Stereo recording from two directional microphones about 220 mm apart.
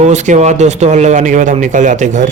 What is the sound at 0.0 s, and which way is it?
A man's voice, 30° right (ahead or behind).